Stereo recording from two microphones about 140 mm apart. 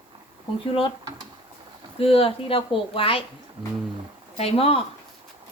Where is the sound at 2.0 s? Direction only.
40° left (ahead or behind).